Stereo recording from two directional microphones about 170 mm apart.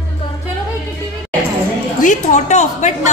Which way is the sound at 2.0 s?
45° left (ahead or behind).